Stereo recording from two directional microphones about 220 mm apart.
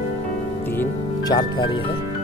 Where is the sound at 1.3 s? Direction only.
15° left (ahead or behind).